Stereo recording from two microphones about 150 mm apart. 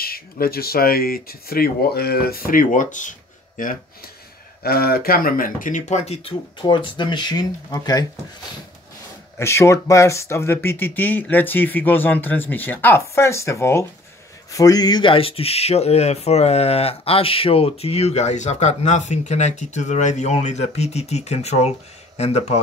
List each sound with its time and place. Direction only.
0.0 s speech: 90° left; by 4.1 s 65° left (ahead or behind)
4.6 s speech: 90° left; by 8.0 s 25° left (ahead or behind)
9.4 s speech: 20° left (ahead or behind); by 22.6 s 45° left (ahead or behind)